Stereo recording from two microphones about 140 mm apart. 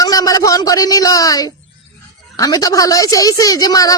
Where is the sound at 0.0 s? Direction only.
25° left (ahead or behind).